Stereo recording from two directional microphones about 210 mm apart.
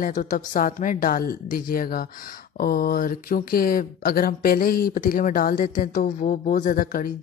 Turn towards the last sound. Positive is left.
turn(degrees=40)  # may be behind; listen again after turning